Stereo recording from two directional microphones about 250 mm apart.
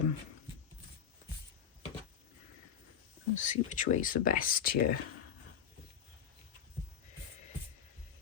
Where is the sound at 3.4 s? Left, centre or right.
Left.